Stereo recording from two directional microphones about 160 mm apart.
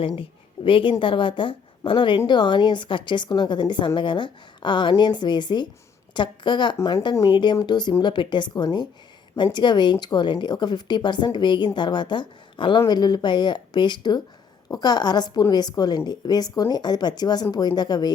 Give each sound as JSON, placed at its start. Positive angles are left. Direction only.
{"t": 0.2, "sound": "a woman's voice", "side_deg": 30}